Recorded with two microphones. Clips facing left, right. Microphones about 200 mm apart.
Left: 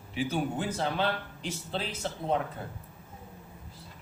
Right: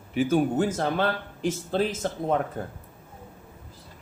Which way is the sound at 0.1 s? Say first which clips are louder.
Right 8 dB; 50° right (ahead or behind).